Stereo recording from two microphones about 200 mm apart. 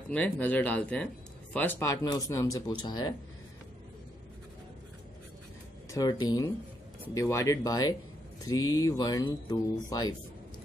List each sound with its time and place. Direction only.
0.1 s speech: 10° left (ahead or behind)
5.9 s speech: 20° left (ahead or behind)